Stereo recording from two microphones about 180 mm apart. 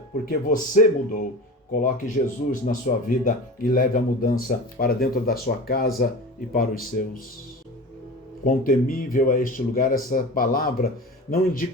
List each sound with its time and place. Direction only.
0.3 s speech: 50° left (ahead or behind)
8.4 s speech: 50° left (ahead or behind)